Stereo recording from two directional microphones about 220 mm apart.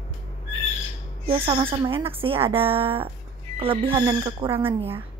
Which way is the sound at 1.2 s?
25° right (ahead or behind).